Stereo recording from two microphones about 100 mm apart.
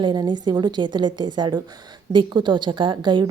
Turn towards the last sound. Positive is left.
turn(degrees=-50)  # may be behind; listen again after turning